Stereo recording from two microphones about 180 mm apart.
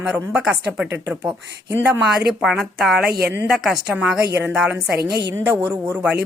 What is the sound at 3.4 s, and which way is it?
Speech, centre (ahead or behind).